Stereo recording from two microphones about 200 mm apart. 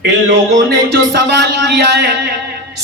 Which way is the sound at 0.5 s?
60° right (ahead or behind).